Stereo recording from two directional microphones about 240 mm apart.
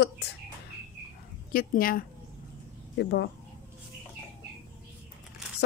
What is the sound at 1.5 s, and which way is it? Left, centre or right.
A woman's voice, left.